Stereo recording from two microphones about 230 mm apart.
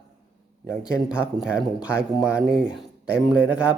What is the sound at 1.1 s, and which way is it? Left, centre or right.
Speech, centre.